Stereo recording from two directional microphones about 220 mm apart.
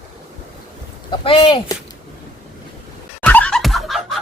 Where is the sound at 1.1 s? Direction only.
25° left (ahead or behind).